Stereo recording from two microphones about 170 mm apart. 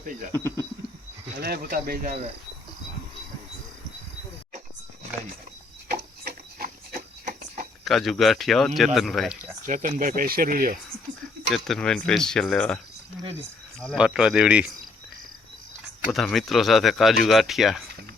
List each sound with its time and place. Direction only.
0.3 s speech: 15° left (ahead or behind)
1.4 s speech: 60° right (ahead or behind)
5.9 s a sound: 65° right (ahead or behind)
7.3 s a sound: 45° right (ahead or behind)
7.9 s speech: centre (ahead or behind)
9.6 s speech: 50° right (ahead or behind)
11.5 s speech: centre (ahead or behind)
16.0 s speech: centre (ahead or behind)